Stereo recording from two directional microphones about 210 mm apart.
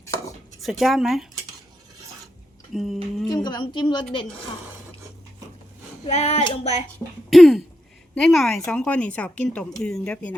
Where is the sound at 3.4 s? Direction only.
20° left (ahead or behind).